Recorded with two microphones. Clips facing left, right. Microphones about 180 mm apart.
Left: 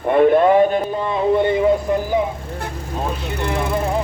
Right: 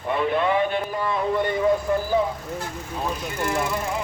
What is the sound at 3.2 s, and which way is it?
Speech, 65° left (ahead or behind).